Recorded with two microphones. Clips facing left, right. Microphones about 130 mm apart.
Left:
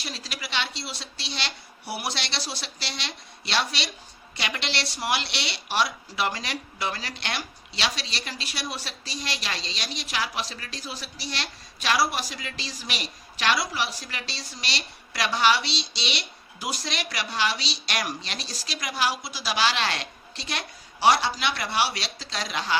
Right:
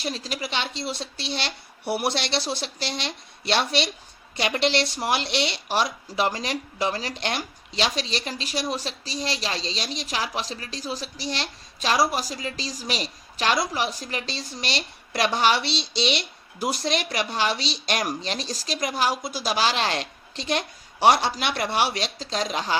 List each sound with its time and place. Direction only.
0.0 s a woman's voice: 45° right (ahead or behind)